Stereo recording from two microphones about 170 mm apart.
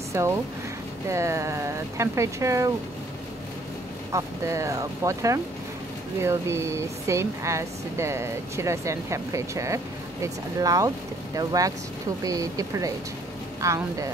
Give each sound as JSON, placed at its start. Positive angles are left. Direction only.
{"t": 0.1, "sound": "speech", "side_deg": -15}
{"t": 4.1, "sound": "speech", "side_deg": -15}